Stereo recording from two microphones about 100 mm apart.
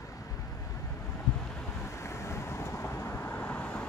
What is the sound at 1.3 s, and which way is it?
Wind, 5° left (ahead or behind).